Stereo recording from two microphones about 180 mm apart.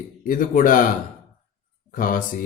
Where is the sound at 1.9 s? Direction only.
50° left (ahead or behind).